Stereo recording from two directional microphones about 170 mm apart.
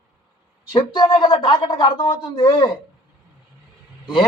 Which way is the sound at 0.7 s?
25° left (ahead or behind).